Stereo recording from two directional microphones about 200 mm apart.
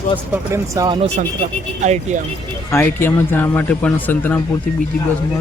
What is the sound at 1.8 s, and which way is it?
Speech, 35° right (ahead or behind).